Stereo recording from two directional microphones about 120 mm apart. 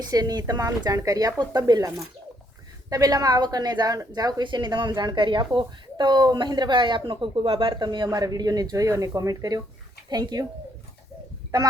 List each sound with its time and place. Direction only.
0.0 s a woman's voice: 35° right (ahead or behind)
2.9 s a woman's voice: 30° right (ahead or behind)